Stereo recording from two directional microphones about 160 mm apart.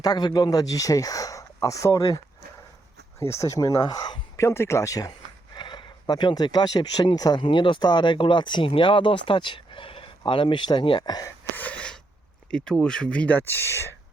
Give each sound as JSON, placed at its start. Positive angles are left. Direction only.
{"t": 0.0, "sound": "speech", "side_deg": 25}
{"t": 4.4, "sound": "speech", "side_deg": 15}
{"t": 11.5, "sound": "gasp", "side_deg": 10}
{"t": 12.5, "sound": "speech", "side_deg": 5}